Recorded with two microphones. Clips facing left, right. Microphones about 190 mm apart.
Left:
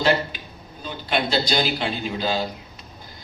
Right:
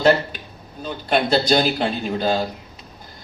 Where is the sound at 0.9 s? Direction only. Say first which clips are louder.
Right 5 dB; 45° right (ahead or behind).